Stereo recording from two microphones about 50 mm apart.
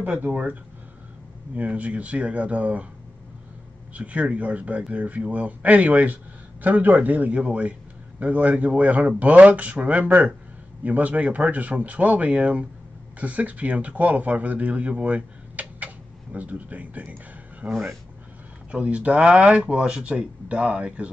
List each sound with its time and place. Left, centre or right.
0.0 s speech: right
3.9 s speech: right
17.6 s speech: centre
18.7 s speech: right